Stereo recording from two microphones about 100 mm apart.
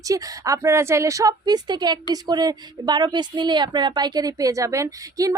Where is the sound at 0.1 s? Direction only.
35° right (ahead or behind).